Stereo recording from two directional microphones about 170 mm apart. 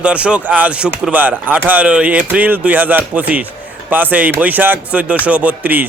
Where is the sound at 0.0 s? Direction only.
5° right (ahead or behind).